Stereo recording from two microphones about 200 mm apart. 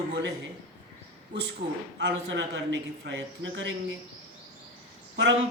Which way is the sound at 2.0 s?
60° right (ahead or behind).